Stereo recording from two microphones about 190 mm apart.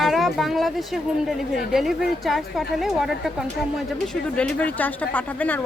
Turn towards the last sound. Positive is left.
turn(degrees=10)  # may be behind; listen again after turning